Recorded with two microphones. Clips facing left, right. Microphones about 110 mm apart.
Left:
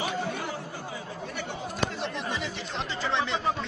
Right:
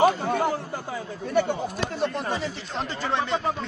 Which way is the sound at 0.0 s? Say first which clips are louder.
Right 10 dB; 50° right (ahead or behind).